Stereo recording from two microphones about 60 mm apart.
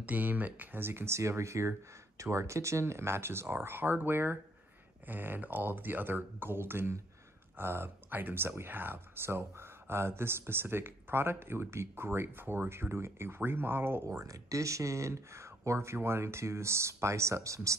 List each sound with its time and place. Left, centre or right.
0.0 s speech: right
14.0 s speech: right